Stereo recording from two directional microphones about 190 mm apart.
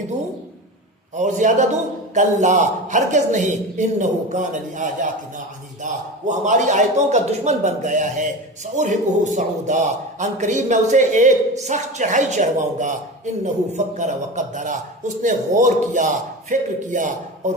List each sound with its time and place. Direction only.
1.1 s a man's voice: 40° right (ahead or behind)